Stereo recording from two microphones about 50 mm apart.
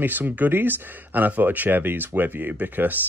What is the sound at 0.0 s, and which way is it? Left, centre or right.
Speech, right.